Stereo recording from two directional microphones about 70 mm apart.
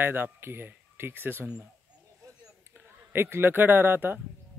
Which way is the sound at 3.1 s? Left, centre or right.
Right.